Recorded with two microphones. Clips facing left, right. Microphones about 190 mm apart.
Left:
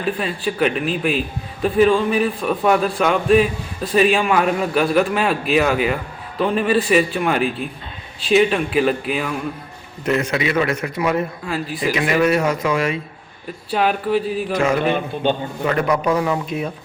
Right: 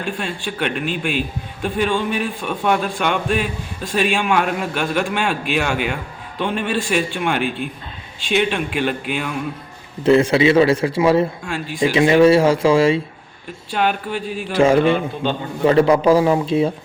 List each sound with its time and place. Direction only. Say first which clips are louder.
0.0 s a man's voice: left 3 dB; 5° left (ahead or behind)
10.0 s a man's voice: right 7 dB; 30° right (ahead or behind)
11.4 s a man's voice: right 3 dB; 5° left (ahead or behind)
11.9 s a man's voice: right 6 dB; 30° right (ahead or behind)
13.7 s a man's voice: left 2 dB; centre (ahead or behind)
14.5 s a man's voice: right 5 dB; 30° right (ahead or behind)